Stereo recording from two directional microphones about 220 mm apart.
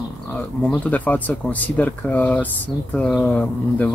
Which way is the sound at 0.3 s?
5° left (ahead or behind).